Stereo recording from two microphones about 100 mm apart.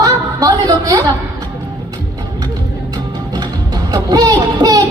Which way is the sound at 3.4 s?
40° right (ahead or behind).